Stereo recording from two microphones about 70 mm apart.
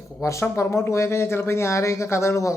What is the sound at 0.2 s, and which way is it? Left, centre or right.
Speech, left.